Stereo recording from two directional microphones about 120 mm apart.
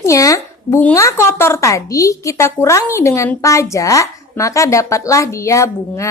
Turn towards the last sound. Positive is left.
turn(degrees=25)  # may be behind; listen again after turning